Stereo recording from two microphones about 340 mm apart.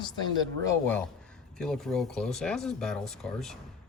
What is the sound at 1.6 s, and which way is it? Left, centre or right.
Speech, centre.